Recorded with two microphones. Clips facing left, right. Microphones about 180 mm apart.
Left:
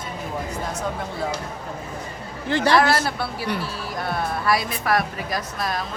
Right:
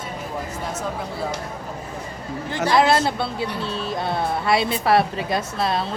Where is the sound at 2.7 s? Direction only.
20° right (ahead or behind).